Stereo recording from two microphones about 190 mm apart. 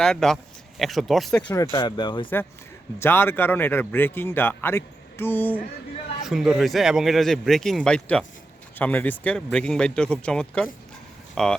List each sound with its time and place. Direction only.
0.0 s speech: 5° left (ahead or behind)
1.7 s speech: 25° left (ahead or behind)
3.0 s speech: 10° left (ahead or behind)
6.2 s speech: centre (ahead or behind)